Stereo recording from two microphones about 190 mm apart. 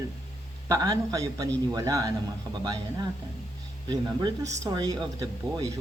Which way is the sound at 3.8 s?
20° right (ahead or behind).